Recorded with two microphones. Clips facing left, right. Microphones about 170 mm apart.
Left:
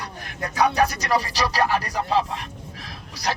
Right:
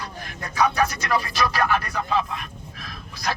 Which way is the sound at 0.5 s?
35° left (ahead or behind).